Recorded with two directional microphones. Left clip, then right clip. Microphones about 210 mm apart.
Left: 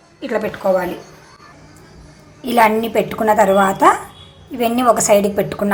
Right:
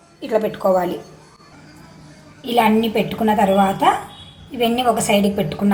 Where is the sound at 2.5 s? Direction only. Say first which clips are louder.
Left 3 dB; 15° left (ahead or behind).